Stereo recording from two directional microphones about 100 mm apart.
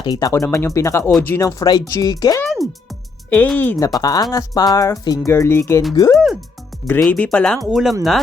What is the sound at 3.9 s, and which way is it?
Speech, 40° left (ahead or behind).